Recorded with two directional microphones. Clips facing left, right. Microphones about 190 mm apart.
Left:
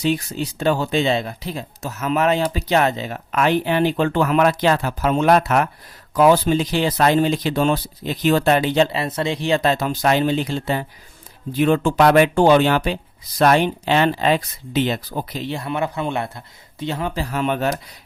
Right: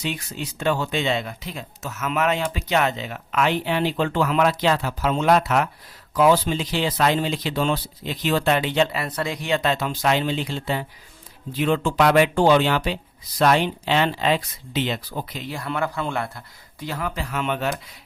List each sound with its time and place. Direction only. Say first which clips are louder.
0.0 s speech: left 8 dB; 35° left (ahead or behind)
15.4 s a man's voice: left 2 dB; 25° left (ahead or behind); by 17.7 s 40° left (ahead or behind)